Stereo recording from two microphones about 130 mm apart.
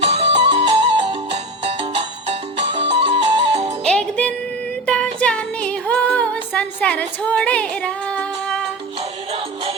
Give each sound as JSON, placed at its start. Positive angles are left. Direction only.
{"t": 0.0, "sound": "music", "side_deg": -50}
{"t": 3.8, "sound": "music", "side_deg": 5}
{"t": 9.0, "sound": "music", "side_deg": -45}